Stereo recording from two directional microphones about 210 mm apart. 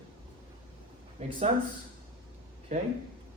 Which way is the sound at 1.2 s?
35° right (ahead or behind).